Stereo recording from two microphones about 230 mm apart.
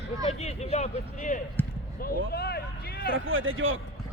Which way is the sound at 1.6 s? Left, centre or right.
Centre.